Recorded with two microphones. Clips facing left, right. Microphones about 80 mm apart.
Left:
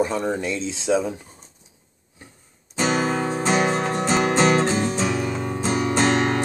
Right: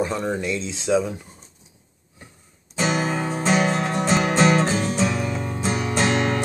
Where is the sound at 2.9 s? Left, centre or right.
Left.